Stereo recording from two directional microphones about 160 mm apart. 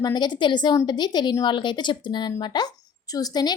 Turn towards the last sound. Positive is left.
turn(degrees=25)  # may be behind; listen again after turning